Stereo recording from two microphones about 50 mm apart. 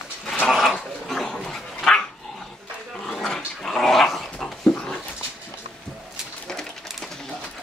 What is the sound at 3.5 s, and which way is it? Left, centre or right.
Dog, centre.